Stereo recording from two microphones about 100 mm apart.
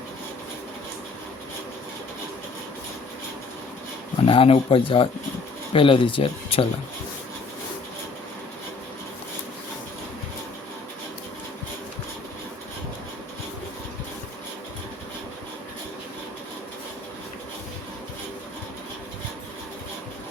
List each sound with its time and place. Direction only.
4.3 s speech: 75° left (ahead or behind)